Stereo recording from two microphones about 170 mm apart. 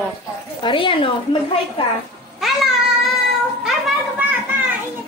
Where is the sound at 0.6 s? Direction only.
30° left (ahead or behind).